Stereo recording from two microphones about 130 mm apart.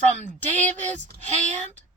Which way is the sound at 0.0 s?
65° right (ahead or behind).